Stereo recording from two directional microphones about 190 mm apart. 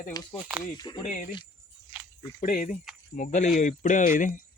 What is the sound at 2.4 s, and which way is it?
Speech, 40° left (ahead or behind).